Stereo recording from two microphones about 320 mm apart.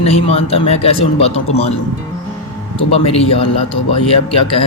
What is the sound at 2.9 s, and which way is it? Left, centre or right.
Speech, centre.